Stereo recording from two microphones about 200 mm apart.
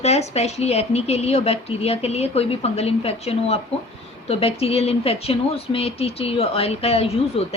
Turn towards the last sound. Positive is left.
turn(degrees=30)  # may be behind; listen again after turning